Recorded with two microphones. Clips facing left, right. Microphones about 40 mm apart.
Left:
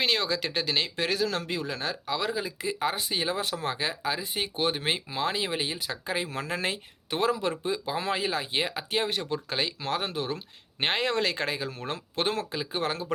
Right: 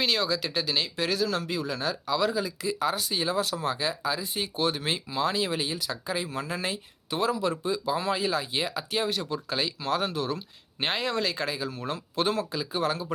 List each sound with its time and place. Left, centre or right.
0.0 s speech: left